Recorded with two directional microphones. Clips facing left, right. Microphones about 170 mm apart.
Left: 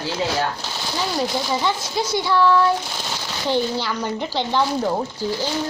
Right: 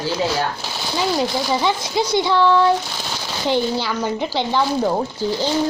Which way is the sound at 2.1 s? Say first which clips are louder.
Right 1 dB; 20° right (ahead or behind).